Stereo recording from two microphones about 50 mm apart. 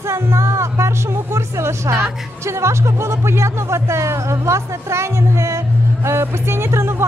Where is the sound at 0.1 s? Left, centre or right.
Right.